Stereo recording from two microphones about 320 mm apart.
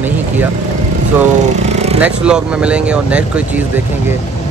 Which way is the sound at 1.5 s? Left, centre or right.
Centre.